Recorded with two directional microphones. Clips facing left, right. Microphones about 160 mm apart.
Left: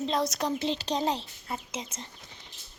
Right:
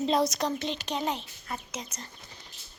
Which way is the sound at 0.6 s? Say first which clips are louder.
Left 3 dB; 30° left (ahead or behind).